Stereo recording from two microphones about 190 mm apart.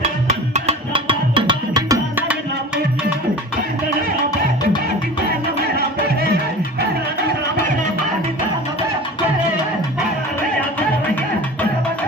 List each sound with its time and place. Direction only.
0.3 s music: 30° right (ahead or behind)
2.1 s music: 5° right (ahead or behind)